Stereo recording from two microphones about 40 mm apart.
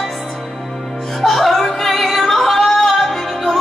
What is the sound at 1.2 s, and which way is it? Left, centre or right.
Music, centre.